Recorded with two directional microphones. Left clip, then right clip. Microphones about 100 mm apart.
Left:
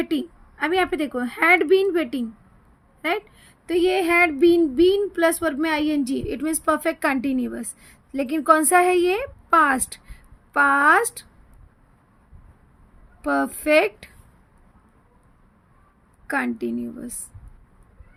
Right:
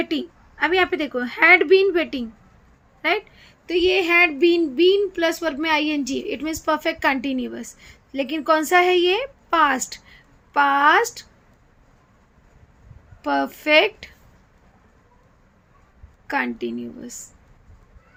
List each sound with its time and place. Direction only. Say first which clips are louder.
0.0 s a woman's voice: even; 35° left (ahead or behind)
3.7 s speech: right 1 dB; 90° left; by 11.3 s 65° left (ahead or behind)
13.2 s a woman's voice: even; 60° left (ahead or behind)
16.2 s speech: right 1 dB; 70° left (ahead or behind)